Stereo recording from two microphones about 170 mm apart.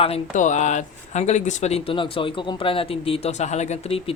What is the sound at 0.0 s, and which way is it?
Speech, 40° left (ahead or behind).